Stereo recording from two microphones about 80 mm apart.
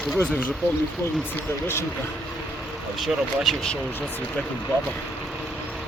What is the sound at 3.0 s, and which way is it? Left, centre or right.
Speech, centre.